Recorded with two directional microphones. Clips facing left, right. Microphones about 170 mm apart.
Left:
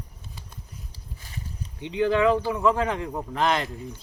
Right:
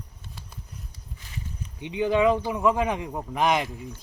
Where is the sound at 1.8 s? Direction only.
15° right (ahead or behind).